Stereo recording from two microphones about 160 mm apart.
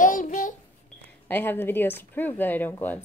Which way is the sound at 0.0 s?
55° left (ahead or behind).